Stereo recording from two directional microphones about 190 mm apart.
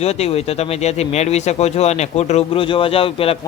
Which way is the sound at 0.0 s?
35° left (ahead or behind).